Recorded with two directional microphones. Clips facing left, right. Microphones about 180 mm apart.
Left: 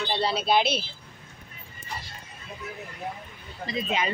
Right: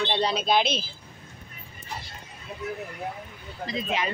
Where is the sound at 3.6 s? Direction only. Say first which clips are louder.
Left 1 dB; centre (ahead or behind).